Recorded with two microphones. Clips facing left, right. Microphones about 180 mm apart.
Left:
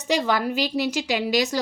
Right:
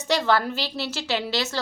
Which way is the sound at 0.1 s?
10° left (ahead or behind).